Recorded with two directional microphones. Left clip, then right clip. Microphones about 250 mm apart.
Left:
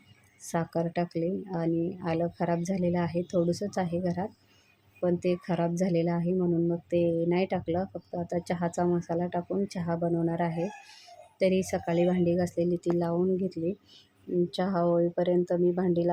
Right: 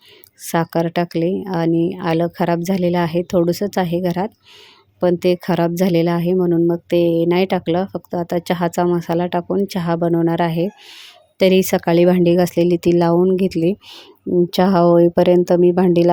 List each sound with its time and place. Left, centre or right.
0.4 s speech: right